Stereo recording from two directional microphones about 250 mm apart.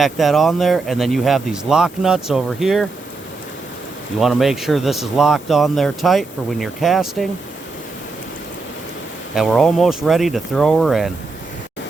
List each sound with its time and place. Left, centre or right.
0.0 s speech: centre
4.2 s speech: centre
9.3 s speech: centre